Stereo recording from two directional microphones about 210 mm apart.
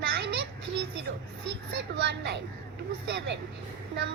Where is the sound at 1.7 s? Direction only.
55° right (ahead or behind).